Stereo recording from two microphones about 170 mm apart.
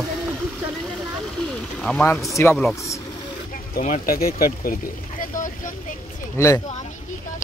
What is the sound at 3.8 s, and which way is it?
Speech, 50° left (ahead or behind).